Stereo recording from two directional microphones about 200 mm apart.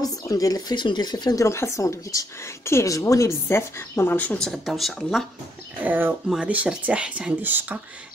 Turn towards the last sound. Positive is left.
turn(degrees=-10)  # may be behind; listen again after turning